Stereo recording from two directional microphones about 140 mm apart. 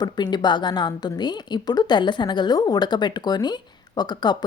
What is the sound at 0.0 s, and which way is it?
A woman's voice, 30° left (ahead or behind).